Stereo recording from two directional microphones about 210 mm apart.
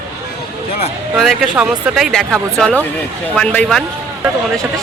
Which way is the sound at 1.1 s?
Centre (ahead or behind).